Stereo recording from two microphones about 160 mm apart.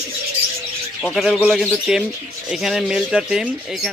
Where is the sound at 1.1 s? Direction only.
Centre (ahead or behind).